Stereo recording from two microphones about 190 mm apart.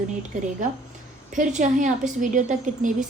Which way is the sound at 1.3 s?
40° right (ahead or behind).